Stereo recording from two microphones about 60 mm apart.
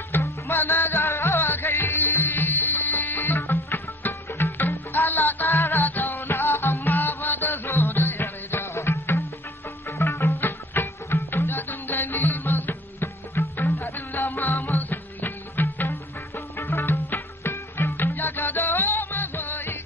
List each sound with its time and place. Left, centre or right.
0.1 s music: left
0.9 s music: left
4.3 s music: left
4.6 s music: left
5.5 s music: left
5.8 s music: left
10.4 s music: left
13.0 s music: left
14.8 s music: left
15.9 s music: left